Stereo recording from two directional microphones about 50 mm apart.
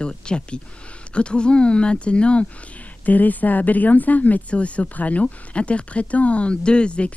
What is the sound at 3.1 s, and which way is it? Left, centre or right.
Speech, left.